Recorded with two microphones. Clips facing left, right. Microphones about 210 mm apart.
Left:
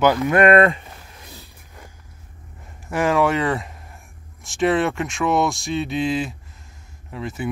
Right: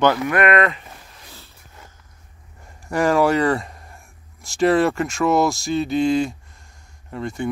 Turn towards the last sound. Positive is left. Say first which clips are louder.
# right 2 dB
turn(degrees=5)  # may be behind; listen again after turning